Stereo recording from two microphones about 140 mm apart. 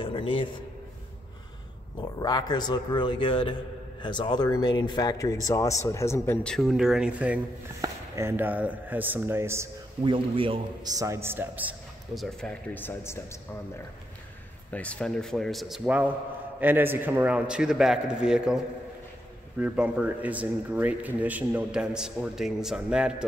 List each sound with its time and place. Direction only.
0.0 s a man's voice: 40° left (ahead or behind)
2.0 s a man's voice: 30° left (ahead or behind); by 9.7 s 20° right (ahead or behind)
10.0 s a man's voice: 40° right (ahead or behind)
11.0 s speech: 20° right (ahead or behind)
12.1 s speech: centre (ahead or behind); by 13.4 s 20° left (ahead or behind)
14.7 s speech: 10° left (ahead or behind)
19.6 s speech: 10° right (ahead or behind)